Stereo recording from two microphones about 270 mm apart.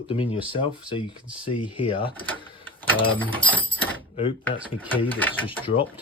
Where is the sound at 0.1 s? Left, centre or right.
Centre.